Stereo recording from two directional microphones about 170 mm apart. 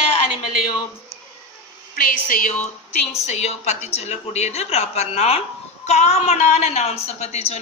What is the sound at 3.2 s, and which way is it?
A woman's voice, 40° left (ahead or behind).